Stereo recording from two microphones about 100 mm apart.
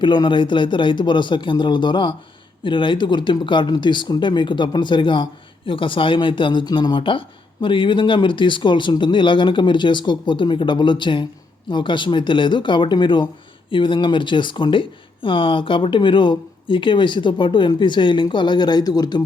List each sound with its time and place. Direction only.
0.0 s speech: 50° left (ahead or behind)